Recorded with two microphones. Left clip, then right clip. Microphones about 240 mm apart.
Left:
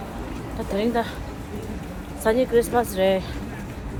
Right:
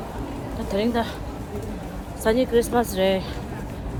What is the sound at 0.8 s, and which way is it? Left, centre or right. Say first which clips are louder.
Speech: even; centre.